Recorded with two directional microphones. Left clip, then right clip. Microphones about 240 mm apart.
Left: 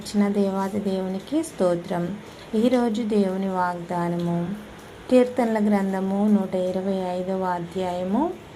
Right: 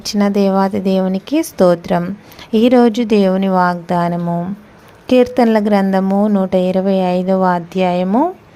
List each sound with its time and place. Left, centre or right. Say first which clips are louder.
0.2 s a woman's voice: right 10 dB; right